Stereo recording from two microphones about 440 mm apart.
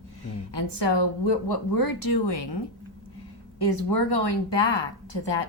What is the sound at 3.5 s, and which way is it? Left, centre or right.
A woman's voice, left.